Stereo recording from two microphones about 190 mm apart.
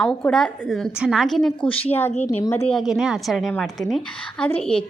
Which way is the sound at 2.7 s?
Centre (ahead or behind).